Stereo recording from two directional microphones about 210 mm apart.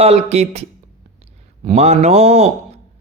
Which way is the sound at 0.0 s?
30° right (ahead or behind).